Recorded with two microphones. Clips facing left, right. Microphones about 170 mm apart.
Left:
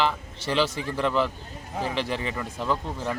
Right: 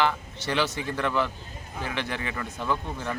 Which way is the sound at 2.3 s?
5° left (ahead or behind).